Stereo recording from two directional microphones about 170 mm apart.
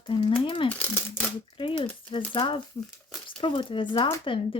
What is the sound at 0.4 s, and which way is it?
Rattle, 30° left (ahead or behind).